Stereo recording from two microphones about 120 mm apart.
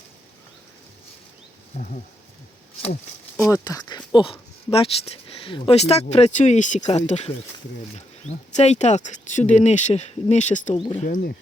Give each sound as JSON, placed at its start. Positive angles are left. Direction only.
{"t": 3.5, "sound": "speech", "side_deg": 30}
{"t": 8.5, "sound": "speech", "side_deg": 70}
{"t": 10.8, "sound": "speech", "side_deg": 45}